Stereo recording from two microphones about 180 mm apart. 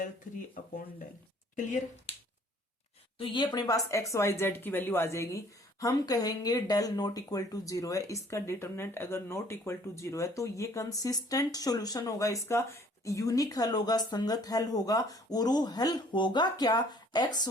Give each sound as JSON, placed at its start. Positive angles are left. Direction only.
{"t": 3.2, "sound": "speech", "side_deg": 25}